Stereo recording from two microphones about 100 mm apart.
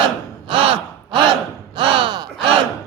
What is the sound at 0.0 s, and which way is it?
Gasp, 55° right (ahead or behind).